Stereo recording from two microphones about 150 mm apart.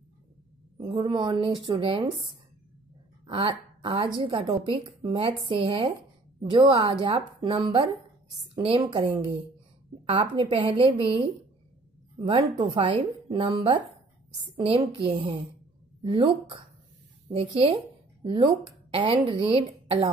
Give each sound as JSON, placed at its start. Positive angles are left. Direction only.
{"t": 0.8, "sound": "a woman's voice", "side_deg": -30}
{"t": 3.3, "sound": "a woman's voice", "side_deg": -35}
{"t": 10.0, "sound": "a woman's voice", "side_deg": -35}